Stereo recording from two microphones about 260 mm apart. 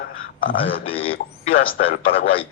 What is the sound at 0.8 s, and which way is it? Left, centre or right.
Speech, left.